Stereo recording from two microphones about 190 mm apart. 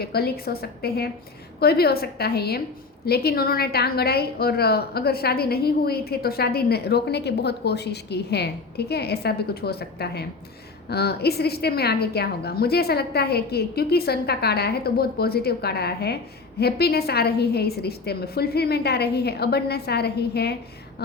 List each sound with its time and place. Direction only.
0.0 s a woman's voice: 55° left (ahead or behind)